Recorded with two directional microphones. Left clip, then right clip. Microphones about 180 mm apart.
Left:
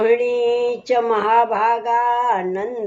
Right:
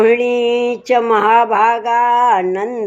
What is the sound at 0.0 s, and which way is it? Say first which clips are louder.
Speech: right 4 dB; 45° right (ahead or behind).